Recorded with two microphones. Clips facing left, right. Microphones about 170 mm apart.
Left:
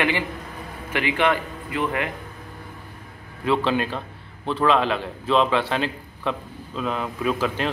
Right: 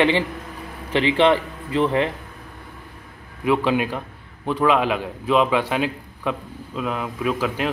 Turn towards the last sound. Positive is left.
turn(degrees=-5)  # may be behind; listen again after turning